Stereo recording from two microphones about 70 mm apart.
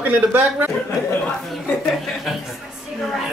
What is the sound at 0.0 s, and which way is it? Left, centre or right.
Speech, right.